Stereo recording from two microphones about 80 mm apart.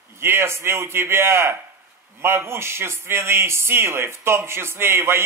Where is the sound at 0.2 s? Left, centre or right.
Right.